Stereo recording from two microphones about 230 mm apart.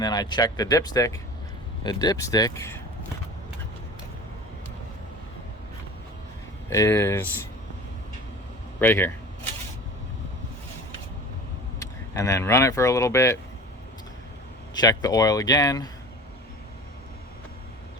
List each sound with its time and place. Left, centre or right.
0.0 s speech: centre
6.7 s speech: centre
8.8 s speech: centre
11.8 s speech: centre
14.8 s speech: centre